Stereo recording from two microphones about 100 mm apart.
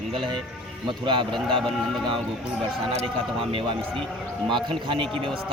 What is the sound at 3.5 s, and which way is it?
Speech, 65° right (ahead or behind).